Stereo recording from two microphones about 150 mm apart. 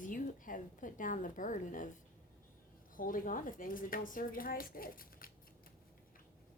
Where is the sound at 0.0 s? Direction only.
60° left (ahead or behind).